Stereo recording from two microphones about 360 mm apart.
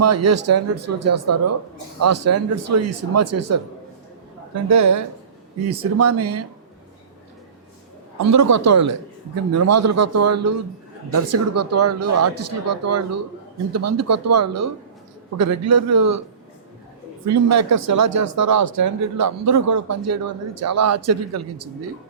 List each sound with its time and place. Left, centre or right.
0.0 s speech: right
5.6 s speech: right
8.2 s speech: right
17.2 s speech: right